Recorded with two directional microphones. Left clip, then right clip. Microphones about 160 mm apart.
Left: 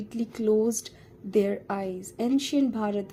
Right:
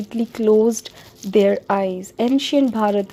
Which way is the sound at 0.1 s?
30° right (ahead or behind).